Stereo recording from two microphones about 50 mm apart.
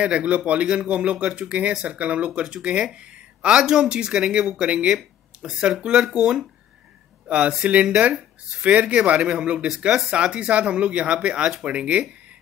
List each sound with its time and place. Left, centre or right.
0.0 s speech: right